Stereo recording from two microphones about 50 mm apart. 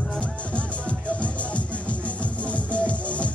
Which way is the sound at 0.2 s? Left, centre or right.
Left.